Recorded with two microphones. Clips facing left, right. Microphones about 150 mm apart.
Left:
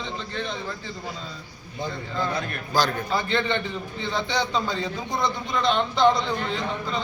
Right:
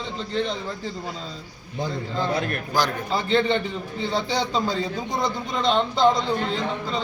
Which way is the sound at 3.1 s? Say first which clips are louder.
Right 3 dB; 30° right (ahead or behind).